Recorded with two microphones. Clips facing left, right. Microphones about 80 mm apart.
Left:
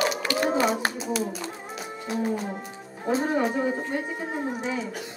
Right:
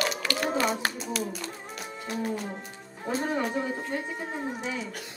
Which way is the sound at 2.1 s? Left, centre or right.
Centre.